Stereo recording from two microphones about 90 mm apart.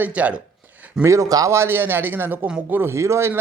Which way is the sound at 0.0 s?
15° right (ahead or behind).